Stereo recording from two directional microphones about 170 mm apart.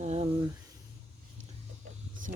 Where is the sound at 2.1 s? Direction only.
50° right (ahead or behind).